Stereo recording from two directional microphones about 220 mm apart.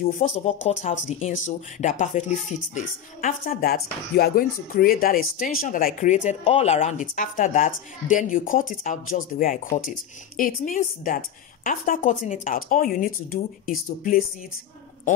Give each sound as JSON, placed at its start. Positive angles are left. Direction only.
{"t": 0.0, "sound": "speech", "side_deg": 35}